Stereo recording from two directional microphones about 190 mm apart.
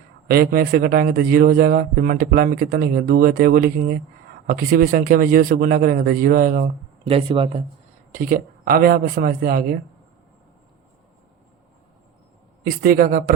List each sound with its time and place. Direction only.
0.3 s speech: 55° right (ahead or behind)
7.1 s speech: 30° right (ahead or behind)
8.1 s speech: 45° right (ahead or behind)
12.8 s speech: 50° right (ahead or behind)